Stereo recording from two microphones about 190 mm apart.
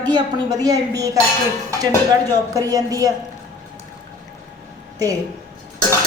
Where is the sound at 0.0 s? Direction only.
20° right (ahead or behind).